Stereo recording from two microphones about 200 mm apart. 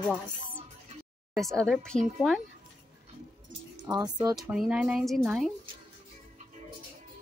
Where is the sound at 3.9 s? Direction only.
20° right (ahead or behind).